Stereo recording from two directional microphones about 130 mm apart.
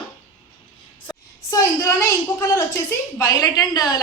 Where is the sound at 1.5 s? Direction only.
25° left (ahead or behind).